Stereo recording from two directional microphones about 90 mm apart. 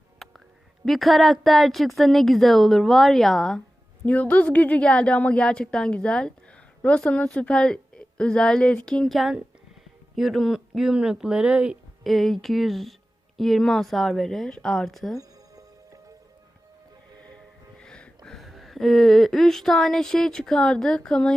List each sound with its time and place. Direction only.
0.9 s a woman's voice: centre (ahead or behind)
12.0 s speech: centre (ahead or behind)
15.2 s music: 40° right (ahead or behind)
17.2 s music: 10° left (ahead or behind)
18.3 s speech: centre (ahead or behind)